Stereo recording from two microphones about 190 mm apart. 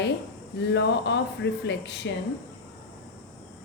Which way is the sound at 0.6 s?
65° left (ahead or behind).